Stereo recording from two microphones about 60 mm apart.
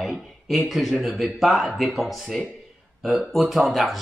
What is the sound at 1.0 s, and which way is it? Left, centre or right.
Speech, centre.